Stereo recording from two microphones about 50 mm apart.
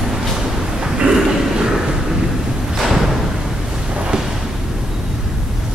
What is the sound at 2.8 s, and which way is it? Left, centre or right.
Thump, centre.